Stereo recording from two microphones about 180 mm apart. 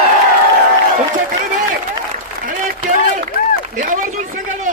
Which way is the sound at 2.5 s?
45° right (ahead or behind).